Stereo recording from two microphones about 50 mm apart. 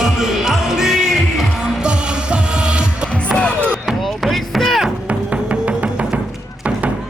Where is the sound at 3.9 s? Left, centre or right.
Centre.